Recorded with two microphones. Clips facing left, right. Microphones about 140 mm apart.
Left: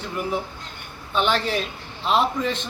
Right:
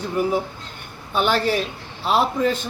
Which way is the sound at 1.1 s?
5° right (ahead or behind).